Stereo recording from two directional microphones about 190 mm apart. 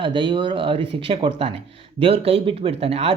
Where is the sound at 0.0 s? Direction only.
25° right (ahead or behind).